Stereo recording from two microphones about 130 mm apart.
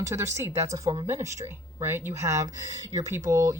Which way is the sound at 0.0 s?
25° right (ahead or behind).